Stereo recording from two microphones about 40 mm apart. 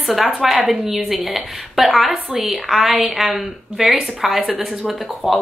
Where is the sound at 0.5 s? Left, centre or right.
Right.